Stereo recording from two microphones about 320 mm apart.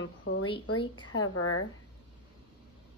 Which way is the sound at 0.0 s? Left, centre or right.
Left.